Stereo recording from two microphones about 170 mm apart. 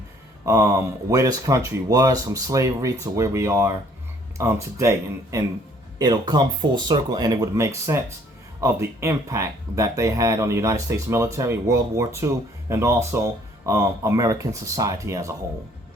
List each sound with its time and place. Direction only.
0.4 s speech: 20° right (ahead or behind)